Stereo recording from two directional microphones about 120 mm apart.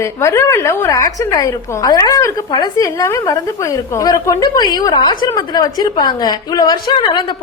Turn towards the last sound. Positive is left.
turn(degrees=40)  # may be behind; listen again after turning